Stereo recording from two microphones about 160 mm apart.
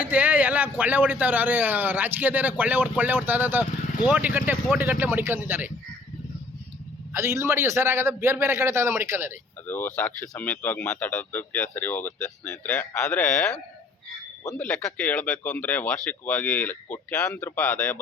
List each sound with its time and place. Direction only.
0.0 s a man's voice: 10° right (ahead or behind)
7.1 s a man's voice: 15° right (ahead or behind)
9.6 s speech: 10° left (ahead or behind)
14.6 s speech: 5° left (ahead or behind)